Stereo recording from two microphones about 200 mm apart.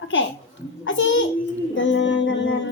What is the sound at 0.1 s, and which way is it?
A child's voice, 75° left (ahead or behind).